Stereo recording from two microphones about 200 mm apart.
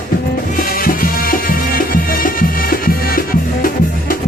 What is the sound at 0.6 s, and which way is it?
Music, 45° left (ahead or behind).